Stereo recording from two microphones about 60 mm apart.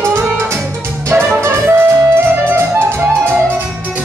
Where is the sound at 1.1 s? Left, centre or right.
Right.